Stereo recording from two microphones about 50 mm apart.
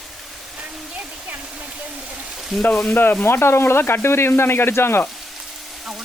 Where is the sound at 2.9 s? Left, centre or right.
Left.